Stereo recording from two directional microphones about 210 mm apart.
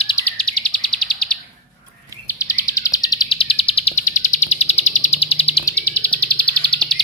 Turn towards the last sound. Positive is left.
turn(degrees=5)  # may be behind; listen again after turning